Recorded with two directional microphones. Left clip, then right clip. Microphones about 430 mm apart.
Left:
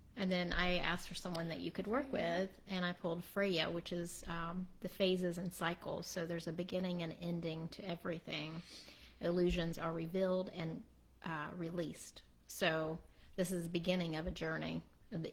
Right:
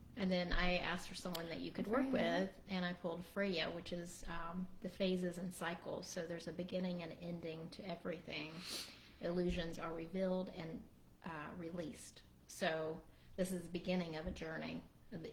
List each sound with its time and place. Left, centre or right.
0.2 s a woman's voice: left